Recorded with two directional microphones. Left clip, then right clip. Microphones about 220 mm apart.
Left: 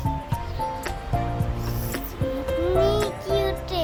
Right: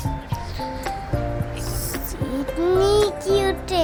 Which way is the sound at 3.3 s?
25° right (ahead or behind).